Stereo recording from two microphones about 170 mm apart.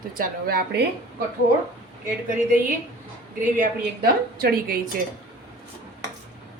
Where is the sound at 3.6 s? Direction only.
65° right (ahead or behind).